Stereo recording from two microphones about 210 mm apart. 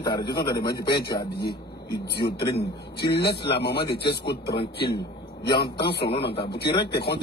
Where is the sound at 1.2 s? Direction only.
50° left (ahead or behind).